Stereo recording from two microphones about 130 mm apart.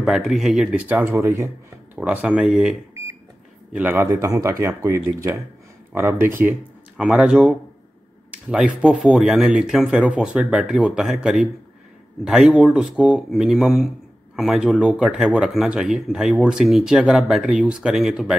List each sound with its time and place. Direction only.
0.0 s speech: centre (ahead or behind); by 1.5 s 20° right (ahead or behind)
2.0 s speech: 5° right (ahead or behind)
3.7 s speech: 15° right (ahead or behind)